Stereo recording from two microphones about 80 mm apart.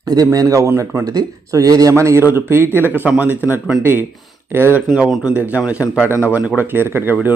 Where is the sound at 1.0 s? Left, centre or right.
Right.